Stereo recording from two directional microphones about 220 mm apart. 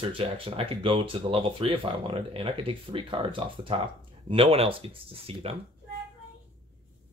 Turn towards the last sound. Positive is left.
turn(degrees=-25)  # may be behind; listen again after turning